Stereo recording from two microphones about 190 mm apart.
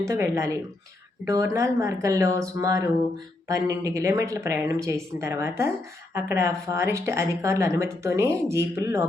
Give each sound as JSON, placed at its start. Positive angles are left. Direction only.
{"t": 0.0, "sound": "a woman's voice", "side_deg": -15}